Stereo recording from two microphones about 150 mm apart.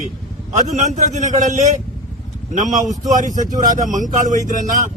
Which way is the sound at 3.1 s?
60° right (ahead or behind).